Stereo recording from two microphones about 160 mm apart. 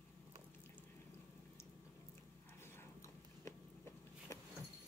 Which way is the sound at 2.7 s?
15° left (ahead or behind).